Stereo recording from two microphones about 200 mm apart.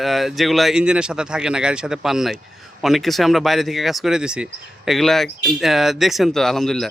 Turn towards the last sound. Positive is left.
turn(degrees=0)  # may be behind; listen again after turning